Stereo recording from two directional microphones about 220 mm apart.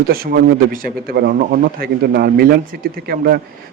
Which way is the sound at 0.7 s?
40° right (ahead or behind).